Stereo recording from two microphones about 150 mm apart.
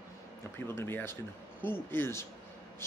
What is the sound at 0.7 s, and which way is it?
Speech, 15° left (ahead or behind).